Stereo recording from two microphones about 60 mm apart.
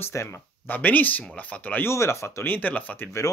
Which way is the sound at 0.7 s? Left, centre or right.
Left.